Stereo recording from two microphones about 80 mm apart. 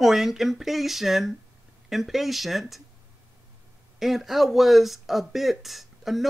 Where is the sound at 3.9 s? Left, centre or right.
Centre.